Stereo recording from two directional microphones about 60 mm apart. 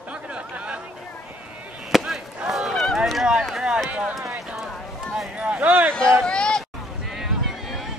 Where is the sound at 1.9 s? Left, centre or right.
Centre.